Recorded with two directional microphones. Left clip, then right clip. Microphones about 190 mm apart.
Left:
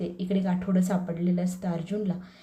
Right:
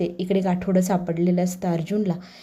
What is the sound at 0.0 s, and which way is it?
Speech, 40° right (ahead or behind).